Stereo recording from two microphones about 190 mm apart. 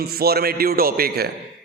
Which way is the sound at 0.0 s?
55° right (ahead or behind).